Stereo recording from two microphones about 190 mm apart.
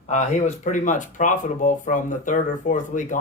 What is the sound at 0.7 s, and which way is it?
Speech, 40° left (ahead or behind).